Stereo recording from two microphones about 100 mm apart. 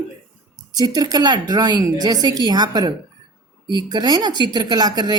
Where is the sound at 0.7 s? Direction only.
40° right (ahead or behind).